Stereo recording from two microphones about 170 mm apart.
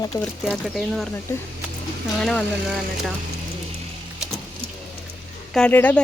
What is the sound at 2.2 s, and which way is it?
Speech, 5° left (ahead or behind).